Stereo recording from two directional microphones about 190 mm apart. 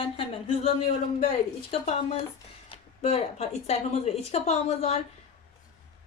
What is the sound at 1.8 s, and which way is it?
Speech, 35° left (ahead or behind).